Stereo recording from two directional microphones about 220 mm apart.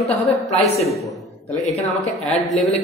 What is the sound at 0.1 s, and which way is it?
A man's voice, centre (ahead or behind).